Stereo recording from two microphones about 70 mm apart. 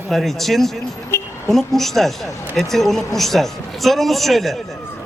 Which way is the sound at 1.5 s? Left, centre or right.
Centre.